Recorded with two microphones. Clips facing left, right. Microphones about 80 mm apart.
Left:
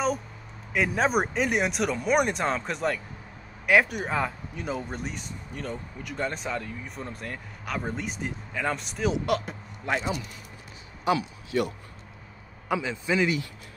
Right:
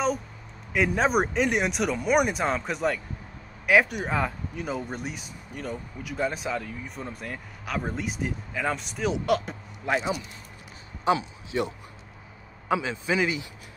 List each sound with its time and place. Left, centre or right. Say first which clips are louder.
0.7 s speech: right 1 dB; centre
11.1 s a man's voice: right 1 dB; right